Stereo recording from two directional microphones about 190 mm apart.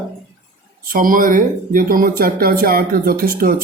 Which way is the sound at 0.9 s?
45° right (ahead or behind).